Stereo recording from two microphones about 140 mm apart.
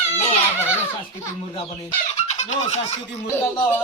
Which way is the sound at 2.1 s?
55° left (ahead or behind).